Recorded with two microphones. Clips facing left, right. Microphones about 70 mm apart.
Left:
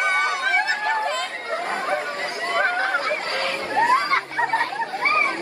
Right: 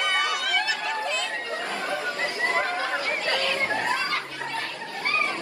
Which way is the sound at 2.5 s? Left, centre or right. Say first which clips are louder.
Left 5 dB; left.